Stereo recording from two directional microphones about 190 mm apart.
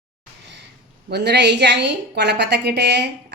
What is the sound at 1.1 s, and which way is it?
A woman's voice, 60° right (ahead or behind).